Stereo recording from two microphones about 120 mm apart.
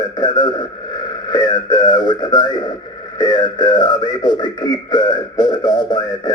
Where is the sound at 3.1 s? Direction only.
35° left (ahead or behind).